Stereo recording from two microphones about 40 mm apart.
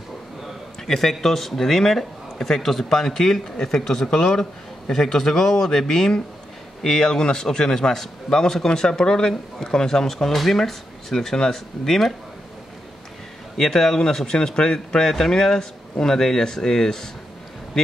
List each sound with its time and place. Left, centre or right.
0.8 s speech: centre
13.6 s speech: centre